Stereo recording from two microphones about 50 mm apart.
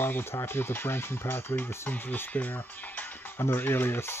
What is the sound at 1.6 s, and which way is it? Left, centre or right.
Speech, left.